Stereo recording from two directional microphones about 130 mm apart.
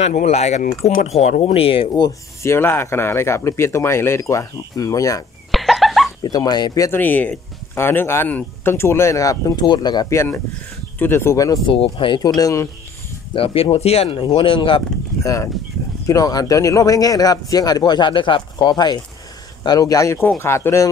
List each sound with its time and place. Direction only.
0.0 s speech: 60° left (ahead or behind)
1.4 s speech: 45° left (ahead or behind)
2.0 s speech: 20° left (ahead or behind)
5.5 s a sound: centre (ahead or behind)
6.2 s speech: 30° left (ahead or behind)
7.0 s speech: 15° left (ahead or behind); by 10.1 s 35° left (ahead or behind)
10.1 s speech: 15° left (ahead or behind)
11.6 s speech: 45° left (ahead or behind); by 12.6 s 25° left (ahead or behind)
13.3 s speech: 45° left (ahead or behind)
15.2 s speech: 25° left (ahead or behind)